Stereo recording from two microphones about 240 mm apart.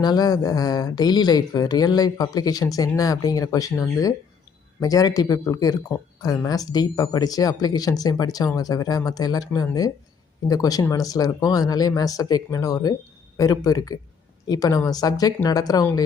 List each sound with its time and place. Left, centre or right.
0.0 s speech: centre